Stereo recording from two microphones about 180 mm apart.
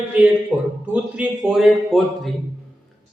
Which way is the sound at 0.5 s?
10° right (ahead or behind).